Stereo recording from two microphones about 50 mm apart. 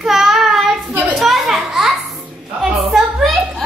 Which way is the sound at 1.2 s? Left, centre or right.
Centre.